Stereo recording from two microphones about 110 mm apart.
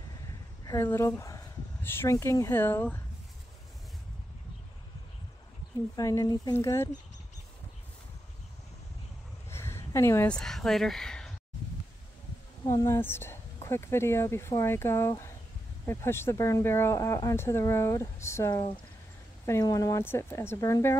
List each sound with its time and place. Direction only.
0.8 s a woman's voice: 25° left (ahead or behind)
5.9 s speech: 30° left (ahead or behind)
6.5 s speech: 25° left (ahead or behind)
9.5 s a sound: 25° left (ahead or behind)
10.2 s speech: 5° left (ahead or behind)
12.6 s speech: 30° left (ahead or behind)
19.6 s speech: 30° left (ahead or behind)